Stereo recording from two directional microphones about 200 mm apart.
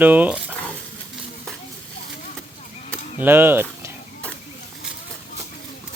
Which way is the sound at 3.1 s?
10° right (ahead or behind).